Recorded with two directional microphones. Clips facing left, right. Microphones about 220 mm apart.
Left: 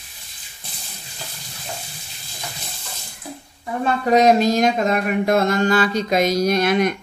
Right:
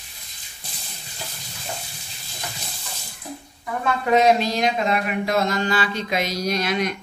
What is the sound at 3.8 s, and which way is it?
Speech, 35° left (ahead or behind).